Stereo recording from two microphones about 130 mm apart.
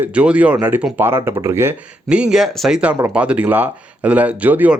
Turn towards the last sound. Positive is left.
turn(degrees=-10)  # may be behind; listen again after turning